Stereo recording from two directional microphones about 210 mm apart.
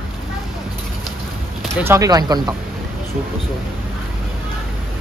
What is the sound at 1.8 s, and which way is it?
Speech, 15° right (ahead or behind).